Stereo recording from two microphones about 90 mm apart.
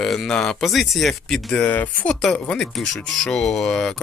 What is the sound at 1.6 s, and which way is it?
Speech, 20° left (ahead or behind).